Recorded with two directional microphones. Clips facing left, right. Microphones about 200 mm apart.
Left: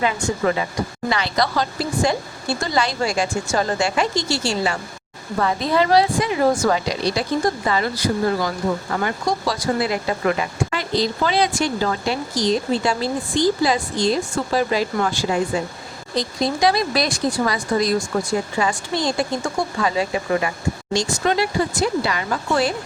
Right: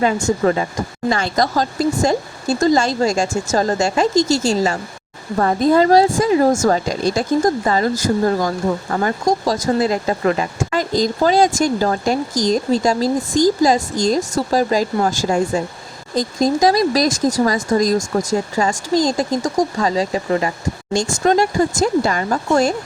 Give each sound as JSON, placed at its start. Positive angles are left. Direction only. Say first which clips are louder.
{"t": 0.0, "sound": "speech", "louder": "right 4 dB", "side_deg": -40}
{"t": 20.9, "sound": "speech", "louder": "right 5 dB", "side_deg": -50}